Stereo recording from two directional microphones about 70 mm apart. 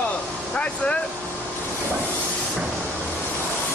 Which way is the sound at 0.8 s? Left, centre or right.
Centre.